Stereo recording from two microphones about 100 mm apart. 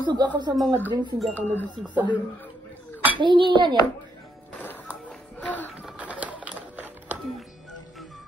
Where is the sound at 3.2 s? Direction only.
50° right (ahead or behind).